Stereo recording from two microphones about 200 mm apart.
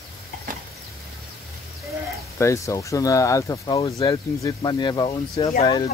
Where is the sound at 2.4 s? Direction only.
15° left (ahead or behind).